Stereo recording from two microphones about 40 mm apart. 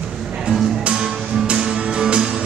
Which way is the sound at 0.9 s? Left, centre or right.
Centre.